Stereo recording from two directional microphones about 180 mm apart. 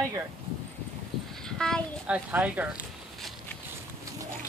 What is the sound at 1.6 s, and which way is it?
Speech, 5° left (ahead or behind).